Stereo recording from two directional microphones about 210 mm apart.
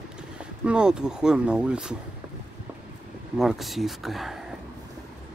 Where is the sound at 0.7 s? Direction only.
5° right (ahead or behind).